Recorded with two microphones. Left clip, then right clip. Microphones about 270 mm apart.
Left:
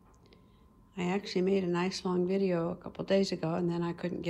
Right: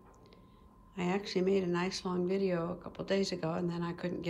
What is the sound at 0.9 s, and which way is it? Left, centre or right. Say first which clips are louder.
A woman's voice: left 1 dB; centre.